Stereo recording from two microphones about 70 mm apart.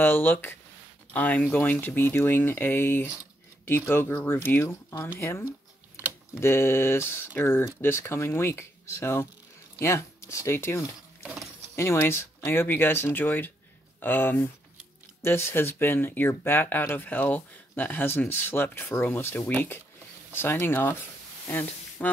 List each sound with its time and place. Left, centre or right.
0.0 s speech: left
5.2 s speech: left
5.9 s computer keyboard: centre
6.4 s speech: left
22.0 s music: left